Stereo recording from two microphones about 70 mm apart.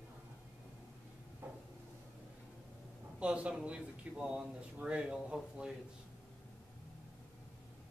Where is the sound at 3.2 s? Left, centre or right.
Centre.